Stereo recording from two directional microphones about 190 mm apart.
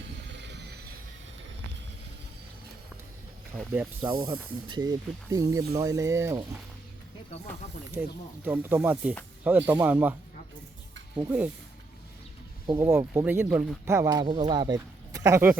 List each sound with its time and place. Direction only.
0.3 s a sound: 65° right (ahead or behind)
4.0 s speech: 25° right (ahead or behind)
8.0 s speech: 10° right (ahead or behind)
11.2 s speech: 10° right (ahead or behind)
12.6 s speech: 15° right (ahead or behind)